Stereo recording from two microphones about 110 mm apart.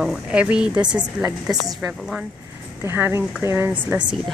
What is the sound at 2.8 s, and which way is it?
A woman's voice, 20° right (ahead or behind).